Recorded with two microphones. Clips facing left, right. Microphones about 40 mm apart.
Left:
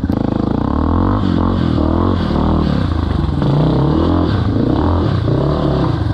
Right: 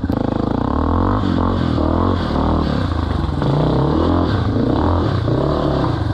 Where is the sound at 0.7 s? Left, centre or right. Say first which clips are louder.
Left 2 dB; centre.